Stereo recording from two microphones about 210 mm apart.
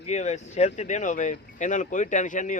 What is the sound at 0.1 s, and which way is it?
Speech, 35° left (ahead or behind).